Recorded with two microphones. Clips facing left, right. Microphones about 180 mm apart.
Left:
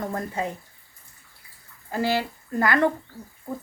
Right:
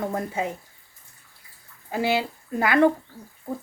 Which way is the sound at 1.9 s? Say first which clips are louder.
Right 1 dB; 15° right (ahead or behind).